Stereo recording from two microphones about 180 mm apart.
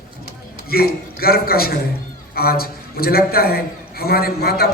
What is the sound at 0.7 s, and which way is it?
A man's voice, 55° left (ahead or behind).